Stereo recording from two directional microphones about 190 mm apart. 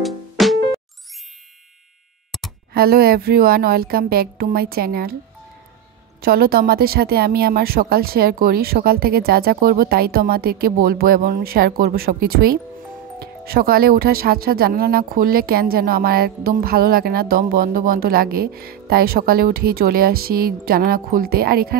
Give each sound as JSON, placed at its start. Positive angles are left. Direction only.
{"t": 0.0, "sound": "music", "side_deg": 0}
{"t": 2.3, "sound": "a sound", "side_deg": 0}
{"t": 2.7, "sound": "speech", "side_deg": -55}
{"t": 6.2, "sound": "speech", "side_deg": -55}